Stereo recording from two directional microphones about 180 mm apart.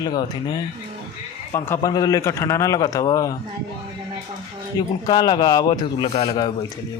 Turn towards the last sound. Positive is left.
turn(degrees=35)  # may be behind; listen again after turning